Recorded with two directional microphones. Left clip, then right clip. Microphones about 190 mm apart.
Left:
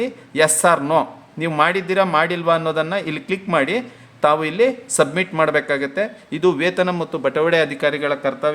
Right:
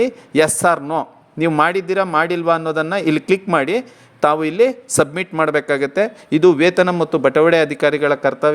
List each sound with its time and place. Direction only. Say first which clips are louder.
0.0 s speech: right 3 dB; 35° right (ahead or behind)